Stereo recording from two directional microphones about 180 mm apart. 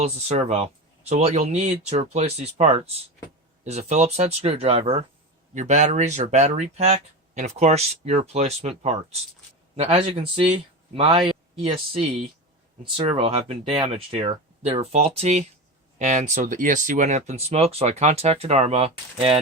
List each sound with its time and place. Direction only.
0.0 s speech: 35° right (ahead or behind)
13.1 s speech: 30° right (ahead or behind)